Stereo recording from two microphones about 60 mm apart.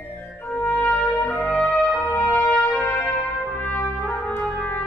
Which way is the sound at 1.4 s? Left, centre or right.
Left.